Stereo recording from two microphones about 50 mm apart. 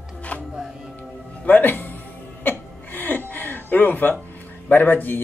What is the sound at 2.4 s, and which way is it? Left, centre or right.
Chuckle, left.